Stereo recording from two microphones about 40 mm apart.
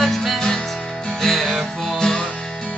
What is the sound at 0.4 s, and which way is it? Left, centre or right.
Music, centre.